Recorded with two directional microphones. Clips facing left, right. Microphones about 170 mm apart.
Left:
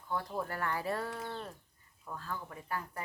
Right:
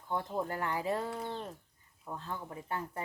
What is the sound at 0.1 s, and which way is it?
Speech, 20° right (ahead or behind).